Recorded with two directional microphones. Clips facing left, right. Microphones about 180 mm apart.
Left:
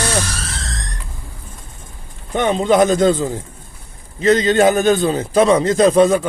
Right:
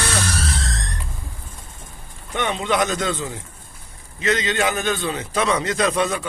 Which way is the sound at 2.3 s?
35° left (ahead or behind).